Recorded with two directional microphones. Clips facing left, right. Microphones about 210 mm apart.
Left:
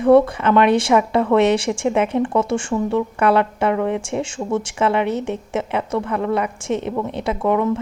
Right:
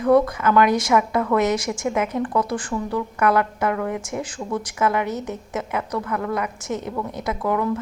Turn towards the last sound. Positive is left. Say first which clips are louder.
# left 4 dB
turn(degrees=25)  # may be behind; listen again after turning